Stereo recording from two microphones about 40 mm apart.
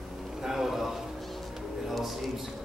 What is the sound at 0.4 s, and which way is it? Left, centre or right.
Music, centre.